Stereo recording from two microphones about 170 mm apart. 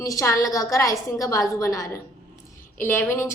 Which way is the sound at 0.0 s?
20° left (ahead or behind).